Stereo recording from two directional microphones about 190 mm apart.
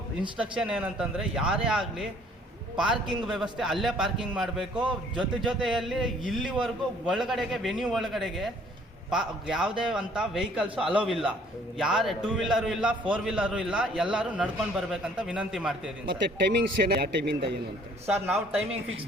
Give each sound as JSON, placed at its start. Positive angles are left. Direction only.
{"t": 0.3, "sound": "a man's voice", "side_deg": -5}
{"t": 16.0, "sound": "a man's voice", "side_deg": -55}
{"t": 18.3, "sound": "a man's voice", "side_deg": -10}